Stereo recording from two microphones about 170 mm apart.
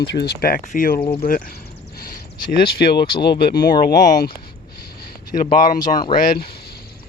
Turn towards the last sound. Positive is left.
turn(degrees=55)  # may be behind; listen again after turning